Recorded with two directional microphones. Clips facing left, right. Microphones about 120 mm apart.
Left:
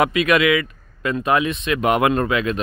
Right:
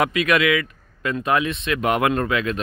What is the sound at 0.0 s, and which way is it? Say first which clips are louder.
Speech: left 2 dB; 20° left (ahead or behind).